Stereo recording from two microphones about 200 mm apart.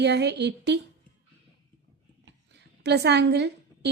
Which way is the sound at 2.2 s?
55° right (ahead or behind).